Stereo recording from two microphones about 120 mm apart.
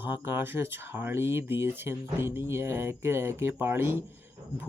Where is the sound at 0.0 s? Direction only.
20° right (ahead or behind).